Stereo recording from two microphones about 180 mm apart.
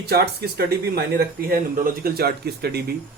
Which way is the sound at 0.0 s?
60° right (ahead or behind).